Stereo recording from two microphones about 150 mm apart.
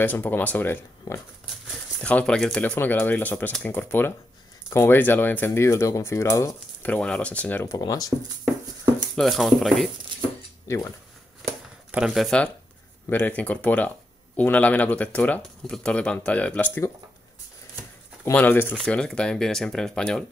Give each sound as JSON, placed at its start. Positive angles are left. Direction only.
{"t": 0.0, "sound": "speech", "side_deg": 10}
{"t": 6.9, "sound": "speech", "side_deg": 10}
{"t": 9.1, "sound": "speech", "side_deg": 0}
{"t": 10.7, "sound": "speech", "side_deg": 20}
{"t": 11.9, "sound": "speech", "side_deg": -5}
{"t": 18.2, "sound": "speech", "side_deg": 10}